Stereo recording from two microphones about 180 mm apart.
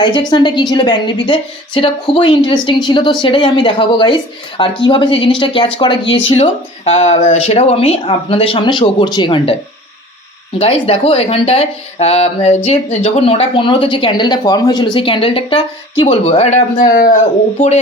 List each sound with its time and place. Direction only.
0.0 s a woman's voice: 25° left (ahead or behind)
10.6 s speech: 35° left (ahead or behind)
16.9 s speech: 50° left (ahead or behind)